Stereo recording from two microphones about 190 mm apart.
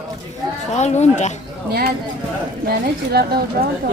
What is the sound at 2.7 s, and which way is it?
Speech, 55° right (ahead or behind).